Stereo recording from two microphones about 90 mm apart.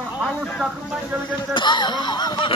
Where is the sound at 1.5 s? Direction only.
60° left (ahead or behind).